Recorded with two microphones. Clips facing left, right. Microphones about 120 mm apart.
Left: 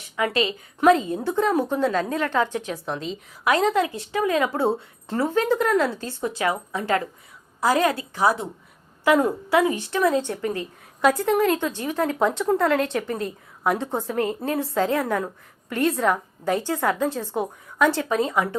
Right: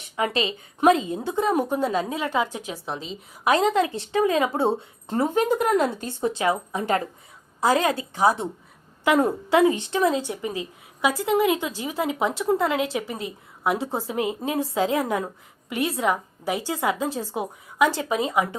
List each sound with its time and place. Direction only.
0.2 s a woman's voice: 20° right (ahead or behind); by 3.2 s centre (ahead or behind)
3.4 s a woman's voice: 20° right (ahead or behind)